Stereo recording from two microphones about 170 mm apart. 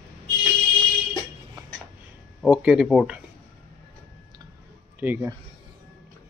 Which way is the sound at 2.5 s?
5° right (ahead or behind).